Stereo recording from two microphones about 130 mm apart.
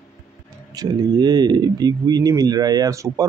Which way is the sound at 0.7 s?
30° right (ahead or behind).